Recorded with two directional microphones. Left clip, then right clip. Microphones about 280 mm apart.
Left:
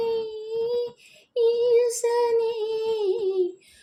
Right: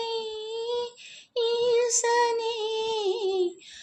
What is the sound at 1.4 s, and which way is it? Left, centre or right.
Child singing, right.